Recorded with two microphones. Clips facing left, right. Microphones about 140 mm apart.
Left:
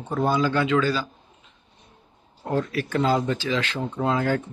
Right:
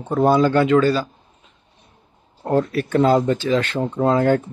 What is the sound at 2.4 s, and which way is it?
Speech, 55° right (ahead or behind).